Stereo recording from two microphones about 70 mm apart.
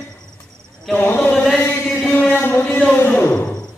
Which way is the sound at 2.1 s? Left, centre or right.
Left.